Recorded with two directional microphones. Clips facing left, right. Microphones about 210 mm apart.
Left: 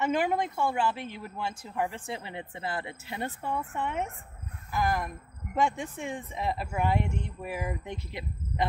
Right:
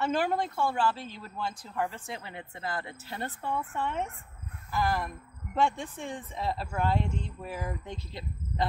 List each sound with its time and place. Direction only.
0.0 s a woman's voice: 15° left (ahead or behind)